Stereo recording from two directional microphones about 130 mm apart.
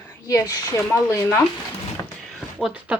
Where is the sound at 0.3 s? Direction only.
25° left (ahead or behind).